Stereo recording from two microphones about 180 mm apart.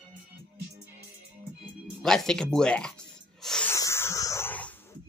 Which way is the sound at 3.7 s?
15° left (ahead or behind).